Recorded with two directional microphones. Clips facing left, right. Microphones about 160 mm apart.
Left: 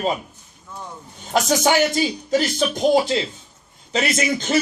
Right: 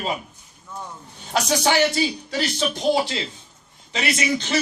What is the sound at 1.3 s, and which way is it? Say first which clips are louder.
Speech: left 2 dB; 45° left (ahead or behind).